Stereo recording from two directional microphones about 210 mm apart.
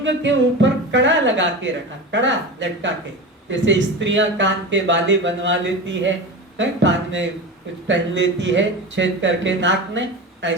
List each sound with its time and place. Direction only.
0.0 s speech: 60° right (ahead or behind)